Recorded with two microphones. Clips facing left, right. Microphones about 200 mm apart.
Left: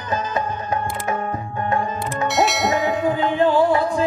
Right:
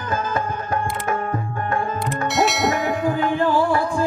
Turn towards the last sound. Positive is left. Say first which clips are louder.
# left 2 dB
turn(degrees=20)  # may be behind; listen again after turning